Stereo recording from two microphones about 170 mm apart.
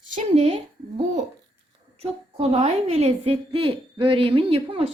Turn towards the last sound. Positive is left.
turn(degrees=-35)  # may be behind; listen again after turning